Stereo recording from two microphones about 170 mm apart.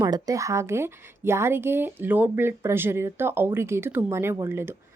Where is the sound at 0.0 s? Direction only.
20° right (ahead or behind).